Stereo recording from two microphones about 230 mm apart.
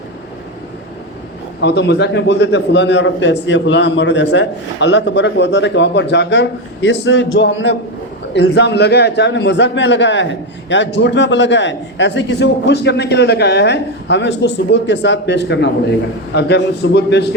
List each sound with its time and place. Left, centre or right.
1.6 s a man's voice: left